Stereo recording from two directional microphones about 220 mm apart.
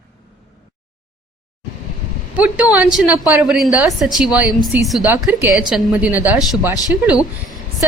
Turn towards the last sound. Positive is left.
turn(degrees=-5)  # may be behind; listen again after turning